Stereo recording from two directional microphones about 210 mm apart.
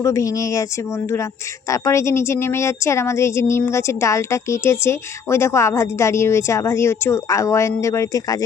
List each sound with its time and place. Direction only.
0.0 s speech: 15° left (ahead or behind)